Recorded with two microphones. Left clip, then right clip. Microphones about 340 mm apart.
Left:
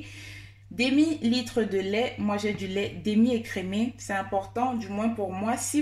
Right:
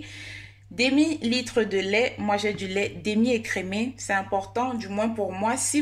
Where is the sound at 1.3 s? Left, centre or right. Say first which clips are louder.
Right 3 dB; right.